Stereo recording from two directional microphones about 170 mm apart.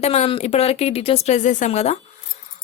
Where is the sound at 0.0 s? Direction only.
40° left (ahead or behind).